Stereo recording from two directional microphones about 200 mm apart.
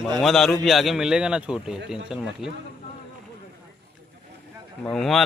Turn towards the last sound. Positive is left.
turn(degrees=0)  # may be behind; listen again after turning